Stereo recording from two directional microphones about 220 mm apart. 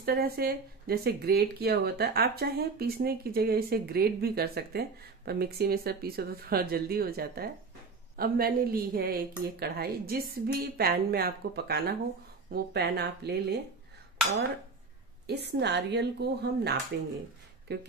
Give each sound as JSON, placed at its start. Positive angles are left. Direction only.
{"t": 0.0, "sound": "speech", "side_deg": -45}
{"t": 15.2, "sound": "speech", "side_deg": -50}